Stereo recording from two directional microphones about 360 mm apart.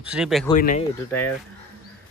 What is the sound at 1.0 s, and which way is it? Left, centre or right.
Speech, centre.